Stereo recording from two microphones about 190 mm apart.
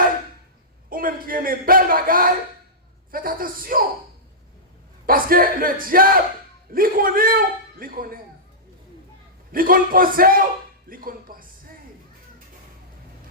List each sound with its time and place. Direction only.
0.9 s a sound: 50° right (ahead or behind)
3.1 s a man's voice: 50° right (ahead or behind)
5.0 s a man's voice: 50° right (ahead or behind)
9.5 s a man's voice: 50° right (ahead or behind)